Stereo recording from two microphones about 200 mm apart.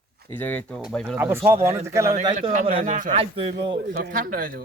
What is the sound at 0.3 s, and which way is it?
Speech, 10° left (ahead or behind).